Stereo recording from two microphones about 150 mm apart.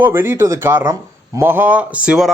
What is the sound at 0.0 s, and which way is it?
A man's voice, 15° right (ahead or behind).